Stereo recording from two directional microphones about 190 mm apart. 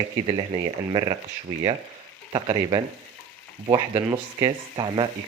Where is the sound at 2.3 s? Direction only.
25° right (ahead or behind).